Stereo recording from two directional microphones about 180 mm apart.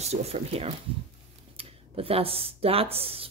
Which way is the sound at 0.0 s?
35° right (ahead or behind).